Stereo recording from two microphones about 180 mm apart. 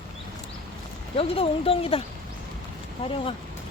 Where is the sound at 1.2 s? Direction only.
30° left (ahead or behind).